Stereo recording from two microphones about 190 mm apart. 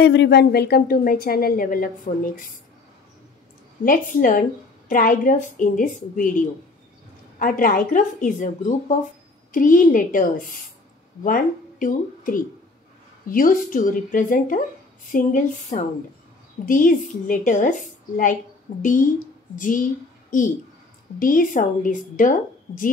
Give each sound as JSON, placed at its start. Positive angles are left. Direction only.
{"t": 0.0, "sound": "a woman's voice", "side_deg": 65}
{"t": 3.8, "sound": "a woman's voice", "side_deg": 45}
{"t": 21.2, "sound": "a woman's voice", "side_deg": 45}